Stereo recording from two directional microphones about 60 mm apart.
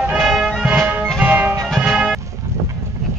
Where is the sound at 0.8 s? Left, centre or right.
Right.